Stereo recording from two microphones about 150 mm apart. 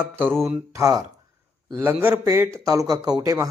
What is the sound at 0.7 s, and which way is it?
Speech, 20° right (ahead or behind).